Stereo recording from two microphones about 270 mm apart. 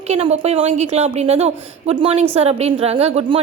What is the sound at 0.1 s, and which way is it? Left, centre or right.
A woman's voice, right.